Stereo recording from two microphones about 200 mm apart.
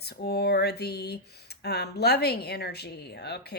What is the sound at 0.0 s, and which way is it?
A woman's voice, 55° left (ahead or behind).